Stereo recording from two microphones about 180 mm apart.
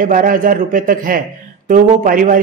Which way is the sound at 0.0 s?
50° right (ahead or behind).